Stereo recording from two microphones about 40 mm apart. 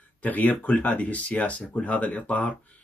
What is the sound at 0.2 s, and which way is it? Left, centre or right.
Speech, left.